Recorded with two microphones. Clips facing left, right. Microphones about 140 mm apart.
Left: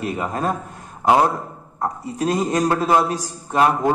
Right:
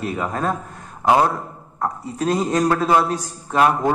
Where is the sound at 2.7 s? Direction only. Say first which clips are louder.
Even; 25° left (ahead or behind).